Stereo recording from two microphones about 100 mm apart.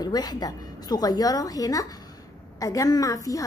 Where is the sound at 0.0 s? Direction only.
40° left (ahead or behind).